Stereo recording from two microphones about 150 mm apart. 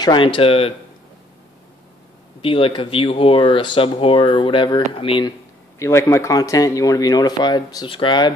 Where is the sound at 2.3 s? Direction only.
35° left (ahead or behind).